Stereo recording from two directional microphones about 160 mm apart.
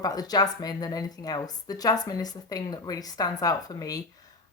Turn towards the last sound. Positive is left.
turn(degrees=20)  # may be behind; listen again after turning